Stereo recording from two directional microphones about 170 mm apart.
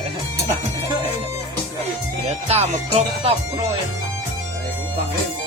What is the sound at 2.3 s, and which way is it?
Speech, 40° right (ahead or behind).